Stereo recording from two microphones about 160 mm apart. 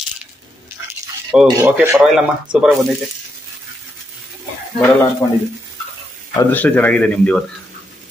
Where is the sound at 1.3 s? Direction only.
5° right (ahead or behind).